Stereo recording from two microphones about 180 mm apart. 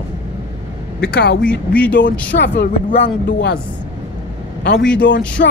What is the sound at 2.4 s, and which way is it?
Speech, 75° left (ahead or behind).